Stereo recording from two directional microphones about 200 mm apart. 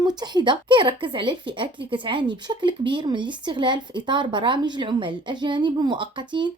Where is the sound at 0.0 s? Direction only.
20° right (ahead or behind).